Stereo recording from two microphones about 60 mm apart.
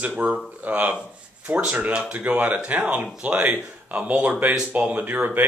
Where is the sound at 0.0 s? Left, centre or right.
Right.